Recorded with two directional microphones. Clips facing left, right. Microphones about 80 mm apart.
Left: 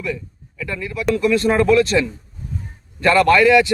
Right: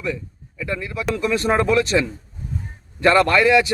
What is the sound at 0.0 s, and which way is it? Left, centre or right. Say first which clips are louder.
A man's voice: even; right.